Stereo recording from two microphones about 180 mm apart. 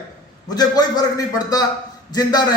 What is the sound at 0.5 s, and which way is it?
A man's voice, 20° left (ahead or behind).